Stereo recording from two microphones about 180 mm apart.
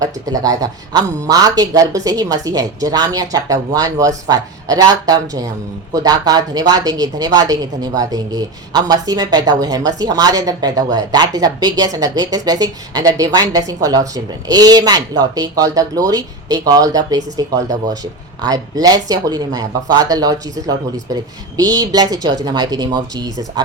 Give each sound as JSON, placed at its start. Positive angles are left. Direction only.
{"t": 0.0, "sound": "speech", "side_deg": -20}